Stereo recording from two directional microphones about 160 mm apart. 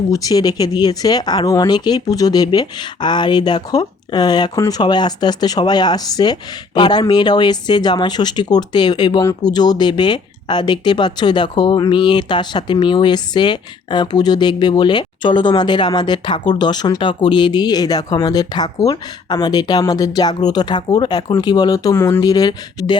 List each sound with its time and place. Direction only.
0.1 s speech: 20° left (ahead or behind)